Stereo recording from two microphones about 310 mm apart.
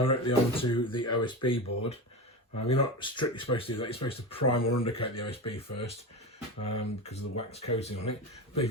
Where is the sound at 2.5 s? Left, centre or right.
Left.